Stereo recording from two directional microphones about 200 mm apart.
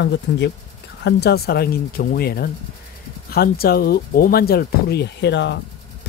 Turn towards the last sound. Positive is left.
turn(degrees=60)  # may be behind; listen again after turning